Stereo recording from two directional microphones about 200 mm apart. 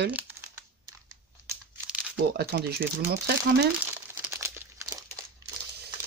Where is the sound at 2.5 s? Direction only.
50° right (ahead or behind).